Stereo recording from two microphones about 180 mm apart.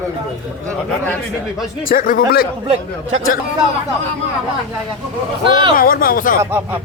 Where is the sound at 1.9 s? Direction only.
50° left (ahead or behind).